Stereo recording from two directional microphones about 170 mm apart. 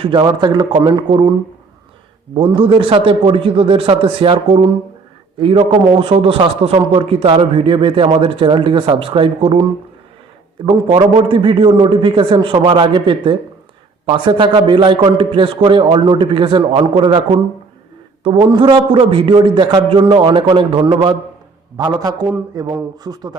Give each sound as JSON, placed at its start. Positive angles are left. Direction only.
{"t": 0.0, "sound": "a man's voice", "side_deg": -25}
{"t": 2.3, "sound": "a man's voice", "side_deg": -30}
{"t": 10.7, "sound": "a man's voice", "side_deg": -30}